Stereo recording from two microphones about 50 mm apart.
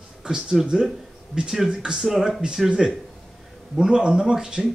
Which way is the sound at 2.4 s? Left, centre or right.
Centre.